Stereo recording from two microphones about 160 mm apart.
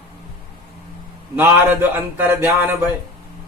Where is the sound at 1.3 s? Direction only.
15° right (ahead or behind).